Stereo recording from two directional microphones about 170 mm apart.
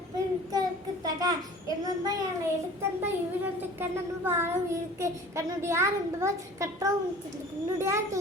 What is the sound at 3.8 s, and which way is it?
A child's voice, 15° right (ahead or behind).